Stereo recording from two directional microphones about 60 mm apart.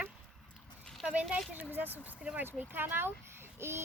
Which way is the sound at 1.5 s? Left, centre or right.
Right.